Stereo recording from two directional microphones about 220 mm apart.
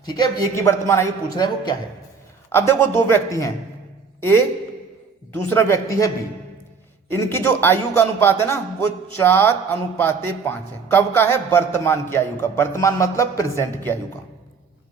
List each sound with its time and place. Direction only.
0.0 s a man's voice: 20° left (ahead or behind)
5.3 s a man's voice: 10° left (ahead or behind)
7.1 s a man's voice: 10° left (ahead or behind)